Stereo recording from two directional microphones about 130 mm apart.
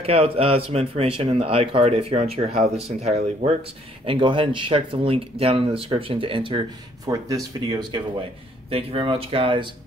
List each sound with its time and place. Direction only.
0.0 s speech: 50° right (ahead or behind)
4.0 s speech: 40° right (ahead or behind)
7.1 s speech: 25° right (ahead or behind)